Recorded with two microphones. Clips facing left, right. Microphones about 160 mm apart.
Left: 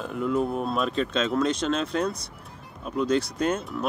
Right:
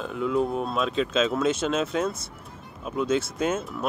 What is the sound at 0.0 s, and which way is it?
Speech, centre (ahead or behind).